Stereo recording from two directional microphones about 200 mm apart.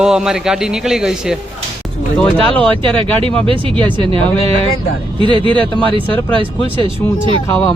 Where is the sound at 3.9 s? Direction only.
30° right (ahead or behind).